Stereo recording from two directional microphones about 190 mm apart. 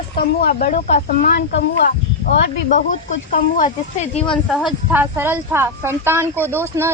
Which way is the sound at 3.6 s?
40° left (ahead or behind).